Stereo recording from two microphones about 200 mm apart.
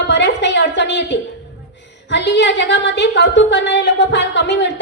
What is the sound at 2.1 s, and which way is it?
A woman's voice, 60° left (ahead or behind).